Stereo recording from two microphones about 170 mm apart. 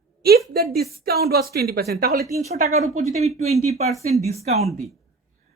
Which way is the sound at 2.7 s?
40° right (ahead or behind).